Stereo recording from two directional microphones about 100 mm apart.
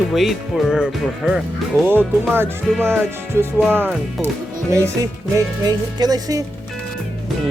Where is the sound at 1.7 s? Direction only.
25° right (ahead or behind).